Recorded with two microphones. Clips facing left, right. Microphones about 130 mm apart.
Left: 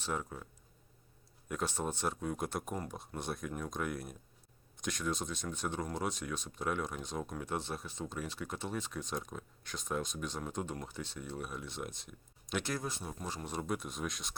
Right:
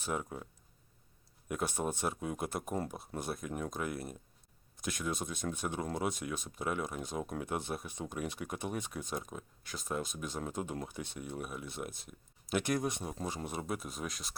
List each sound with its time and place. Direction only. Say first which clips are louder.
0.0 s speech: right 1 dB; 10° right (ahead or behind)
1.5 s speech: right 1 dB; 10° right (ahead or behind)
12.6 s speech: right 5 dB; 20° right (ahead or behind); by 14.3 s centre (ahead or behind)